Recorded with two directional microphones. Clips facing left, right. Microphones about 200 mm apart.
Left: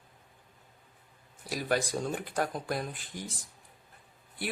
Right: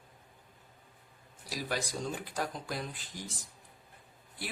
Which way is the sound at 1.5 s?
55° left (ahead or behind).